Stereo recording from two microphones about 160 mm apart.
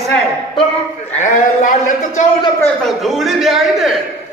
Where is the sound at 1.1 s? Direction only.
50° left (ahead or behind).